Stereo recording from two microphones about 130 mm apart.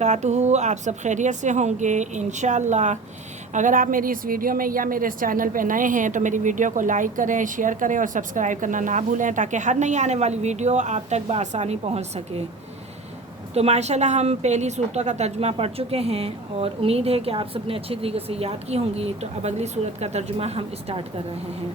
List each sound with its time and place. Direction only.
0.0 s a woman's voice: 65° right (ahead or behind)
3.5 s a woman's voice: 85° right; by 12.2 s 55° right (ahead or behind)
13.5 s a woman's voice: 55° right (ahead or behind)